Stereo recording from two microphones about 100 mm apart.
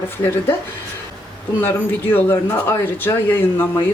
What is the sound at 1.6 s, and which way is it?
Speech, 20° left (ahead or behind).